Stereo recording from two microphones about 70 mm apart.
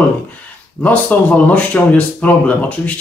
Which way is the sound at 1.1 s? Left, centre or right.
Left.